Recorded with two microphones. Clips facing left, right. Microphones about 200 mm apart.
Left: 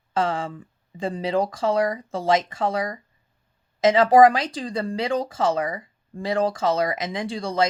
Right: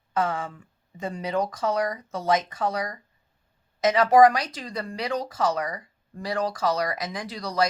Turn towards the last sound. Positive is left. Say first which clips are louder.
# left 3 dB
turn(degrees=25)  # may be behind; listen again after turning